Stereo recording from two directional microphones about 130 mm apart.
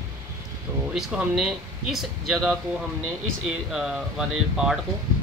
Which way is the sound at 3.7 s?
5° right (ahead or behind).